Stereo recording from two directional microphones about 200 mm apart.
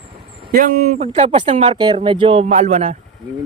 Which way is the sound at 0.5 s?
40° right (ahead or behind).